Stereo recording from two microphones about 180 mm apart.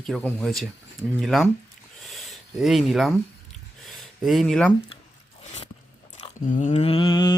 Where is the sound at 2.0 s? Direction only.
Centre (ahead or behind).